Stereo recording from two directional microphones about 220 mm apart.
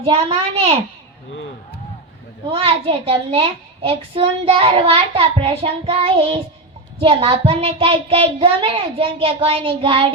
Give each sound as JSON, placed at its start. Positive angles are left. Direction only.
{"t": 0.0, "sound": "a child's voice", "side_deg": -25}
{"t": 2.5, "sound": "a child's voice", "side_deg": -25}